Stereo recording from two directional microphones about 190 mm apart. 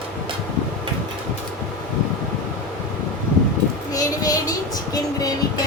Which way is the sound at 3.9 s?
20° left (ahead or behind).